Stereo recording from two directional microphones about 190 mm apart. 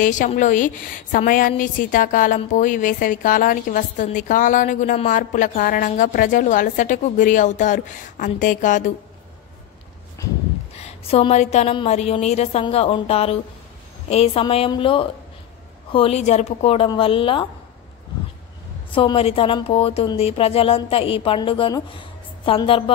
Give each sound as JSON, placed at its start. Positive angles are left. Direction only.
{"t": 0.0, "sound": "a woman's voice", "side_deg": 40}
{"t": 10.8, "sound": "a woman's voice", "side_deg": 35}
{"t": 18.9, "sound": "speech", "side_deg": 30}